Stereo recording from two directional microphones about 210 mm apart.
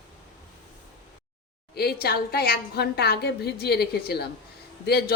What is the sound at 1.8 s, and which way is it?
A woman's voice, 50° left (ahead or behind).